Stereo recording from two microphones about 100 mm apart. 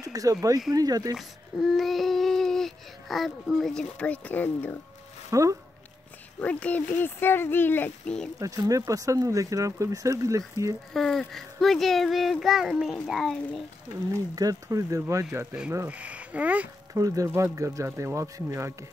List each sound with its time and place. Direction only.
0.0 s speech: 35° right (ahead or behind)
1.1 s speech: centre (ahead or behind); by 4.7 s 20° left (ahead or behind)
5.3 s speech: 30° right (ahead or behind)
6.4 s speech: 15° left (ahead or behind)
8.4 s speech: 35° right (ahead or behind)
10.9 s a child's voice: 5° left (ahead or behind)
14.1 s speech: 40° right (ahead or behind)
15.9 s speech: 15° right (ahead or behind)
16.9 s speech: 35° right (ahead or behind)